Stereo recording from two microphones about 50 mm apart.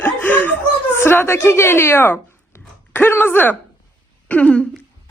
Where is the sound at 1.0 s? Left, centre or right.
Left.